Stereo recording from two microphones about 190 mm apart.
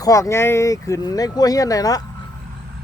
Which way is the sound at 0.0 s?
15° left (ahead or behind).